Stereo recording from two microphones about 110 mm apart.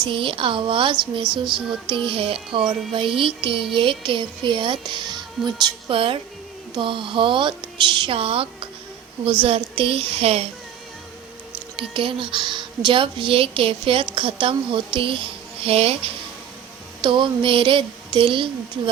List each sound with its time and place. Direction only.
0.1 s a woman's voice: 50° right (ahead or behind)
1.5 s music: 5° right (ahead or behind)
1.9 s a woman's voice: 50° right (ahead or behind)
11.5 s a woman's voice: 55° right (ahead or behind)
17.0 s a woman's voice: 50° right (ahead or behind)